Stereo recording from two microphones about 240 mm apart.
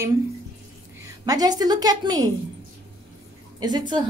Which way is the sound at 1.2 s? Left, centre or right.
Centre.